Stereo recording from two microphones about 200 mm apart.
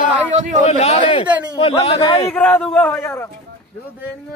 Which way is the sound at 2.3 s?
5° left (ahead or behind).